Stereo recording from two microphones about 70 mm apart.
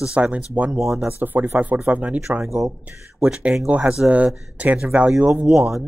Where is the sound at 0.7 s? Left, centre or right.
Centre.